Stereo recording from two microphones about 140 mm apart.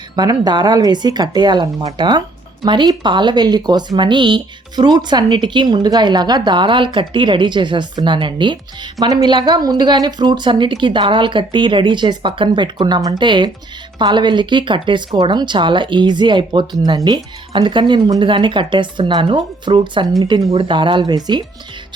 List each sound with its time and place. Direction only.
0.2 s speech: 30° right (ahead or behind)
20.5 s speech: 40° right (ahead or behind)